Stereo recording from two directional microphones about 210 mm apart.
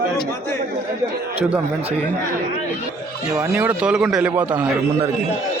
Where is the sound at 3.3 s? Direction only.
10° right (ahead or behind).